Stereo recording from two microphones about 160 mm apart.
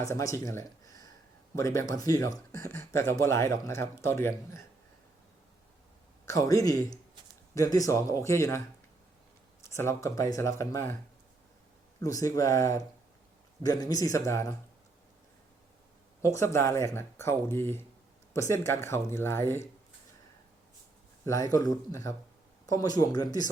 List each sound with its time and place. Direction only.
0.0 s speech: 20° left (ahead or behind)
2.5 s speech: 60° right (ahead or behind)
2.7 s speech: 15° left (ahead or behind)
6.2 s speech: 20° left (ahead or behind)
9.6 s speech: 15° left (ahead or behind)
11.9 s speech: 20° left (ahead or behind)
16.2 s speech: 15° left (ahead or behind)
21.2 s speech: 20° left (ahead or behind)